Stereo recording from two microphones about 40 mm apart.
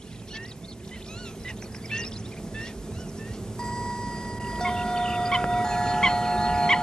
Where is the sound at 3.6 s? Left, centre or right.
Centre.